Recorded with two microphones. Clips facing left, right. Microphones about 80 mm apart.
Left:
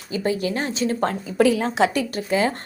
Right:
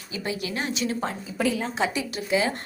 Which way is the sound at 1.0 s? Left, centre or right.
Left.